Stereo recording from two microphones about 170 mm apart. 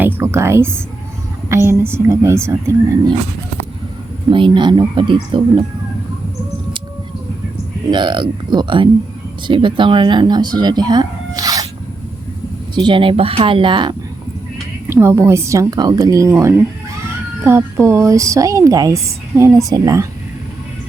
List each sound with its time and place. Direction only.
0.0 s music: 15° right (ahead or behind)
1.5 s a woman's voice: 15° right (ahead or behind)
4.3 s speech: 30° right (ahead or behind)
7.9 s speech: 25° right (ahead or behind)
12.7 s speech: 30° right (ahead or behind)
14.8 s a woman's voice: 15° right (ahead or behind)